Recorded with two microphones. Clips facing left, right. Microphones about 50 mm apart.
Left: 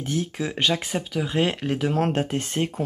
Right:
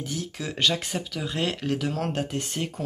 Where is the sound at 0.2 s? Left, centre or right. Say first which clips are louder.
Right 1 dB; centre.